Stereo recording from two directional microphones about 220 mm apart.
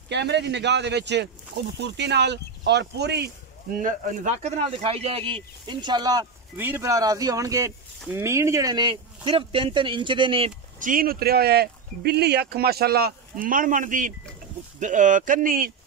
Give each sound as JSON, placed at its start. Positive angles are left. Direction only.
{"t": 0.1, "sound": "speech", "side_deg": -50}
{"t": 3.7, "sound": "speech", "side_deg": -40}
{"t": 10.8, "sound": "speech", "side_deg": -40}